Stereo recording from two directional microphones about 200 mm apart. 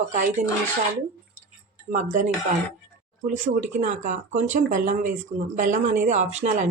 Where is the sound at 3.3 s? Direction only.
40° right (ahead or behind).